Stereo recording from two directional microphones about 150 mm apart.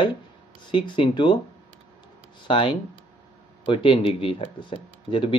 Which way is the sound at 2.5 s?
35° left (ahead or behind).